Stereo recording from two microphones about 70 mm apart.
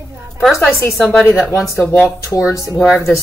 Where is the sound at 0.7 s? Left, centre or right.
Left.